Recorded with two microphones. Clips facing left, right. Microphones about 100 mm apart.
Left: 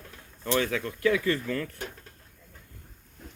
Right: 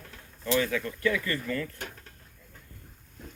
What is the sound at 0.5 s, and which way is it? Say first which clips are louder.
Speech: even; 65° left (ahead or behind).